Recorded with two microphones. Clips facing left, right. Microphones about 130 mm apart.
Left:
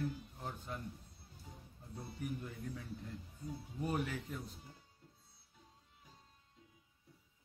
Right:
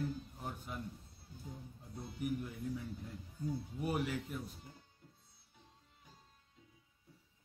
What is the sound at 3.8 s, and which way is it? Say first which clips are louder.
Speech: right 1 dB; 10° right (ahead or behind).